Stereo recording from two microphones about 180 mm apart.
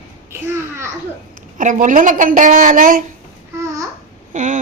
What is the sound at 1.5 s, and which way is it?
A woman's voice, 45° right (ahead or behind).